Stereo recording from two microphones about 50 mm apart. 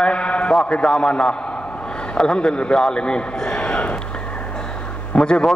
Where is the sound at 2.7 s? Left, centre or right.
Centre.